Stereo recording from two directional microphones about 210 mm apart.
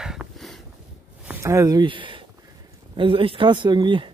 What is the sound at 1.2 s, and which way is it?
Speech, 15° right (ahead or behind).